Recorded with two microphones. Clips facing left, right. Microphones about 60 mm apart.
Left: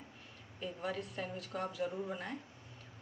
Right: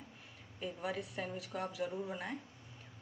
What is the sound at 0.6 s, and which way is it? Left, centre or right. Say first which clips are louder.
A woman's voice: even; centre.